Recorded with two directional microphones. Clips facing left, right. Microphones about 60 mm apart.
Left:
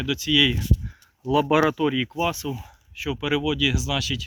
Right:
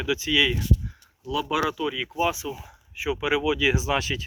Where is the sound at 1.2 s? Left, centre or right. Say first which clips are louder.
Left 6 dB; left.